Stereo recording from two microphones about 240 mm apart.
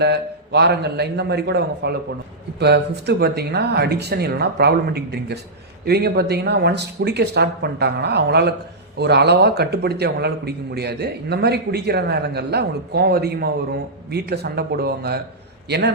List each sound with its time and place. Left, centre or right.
0.0 s a man's voice: right